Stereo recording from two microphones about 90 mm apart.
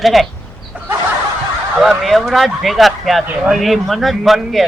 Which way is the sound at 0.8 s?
20° right (ahead or behind).